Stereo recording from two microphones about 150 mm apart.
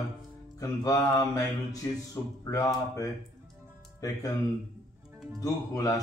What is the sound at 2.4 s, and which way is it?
Speech, 25° left (ahead or behind).